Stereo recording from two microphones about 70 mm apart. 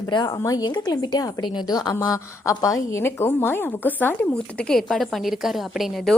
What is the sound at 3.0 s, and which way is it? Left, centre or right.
Speech, left.